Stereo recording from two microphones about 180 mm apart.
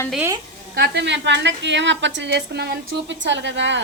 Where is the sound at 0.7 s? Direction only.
70° right (ahead or behind).